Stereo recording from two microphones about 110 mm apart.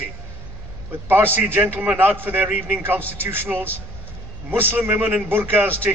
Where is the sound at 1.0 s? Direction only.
20° right (ahead or behind).